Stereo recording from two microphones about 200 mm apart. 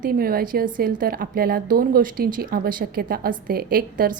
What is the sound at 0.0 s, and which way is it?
A woman's voice, 45° right (ahead or behind).